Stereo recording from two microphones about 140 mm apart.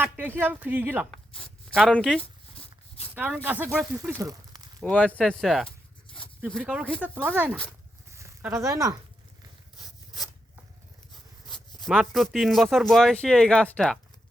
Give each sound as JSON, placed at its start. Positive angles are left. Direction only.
{"t": 0.0, "sound": "speech", "side_deg": -15}
{"t": 1.1, "sound": "speech", "side_deg": 5}
{"t": 3.2, "sound": "speech", "side_deg": -10}
{"t": 4.2, "sound": "a sound", "side_deg": -25}
{"t": 4.8, "sound": "speech", "side_deg": 10}
{"t": 8.1, "sound": "a sound", "side_deg": -20}
{"t": 11.9, "sound": "speech", "side_deg": 0}